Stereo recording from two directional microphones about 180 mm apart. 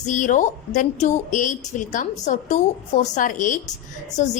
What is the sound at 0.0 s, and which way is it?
A woman's voice, 45° left (ahead or behind).